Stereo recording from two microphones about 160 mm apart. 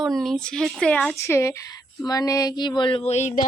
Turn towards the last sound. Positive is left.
turn(degrees=45)  # may be behind; listen again after turning